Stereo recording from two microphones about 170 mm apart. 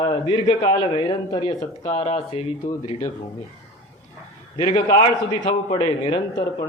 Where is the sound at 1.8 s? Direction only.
40° left (ahead or behind).